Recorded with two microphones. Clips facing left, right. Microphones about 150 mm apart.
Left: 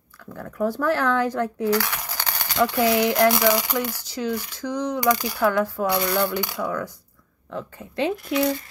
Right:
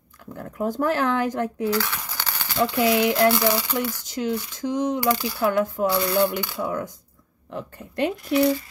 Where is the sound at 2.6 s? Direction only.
20° right (ahead or behind).